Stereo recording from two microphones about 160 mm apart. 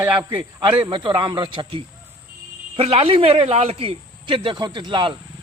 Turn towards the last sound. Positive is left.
turn(degrees=-30)  # may be behind; listen again after turning